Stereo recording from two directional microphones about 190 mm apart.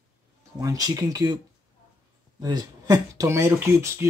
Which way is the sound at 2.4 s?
20° right (ahead or behind).